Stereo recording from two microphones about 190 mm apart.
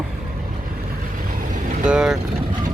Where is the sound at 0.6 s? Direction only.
45° right (ahead or behind).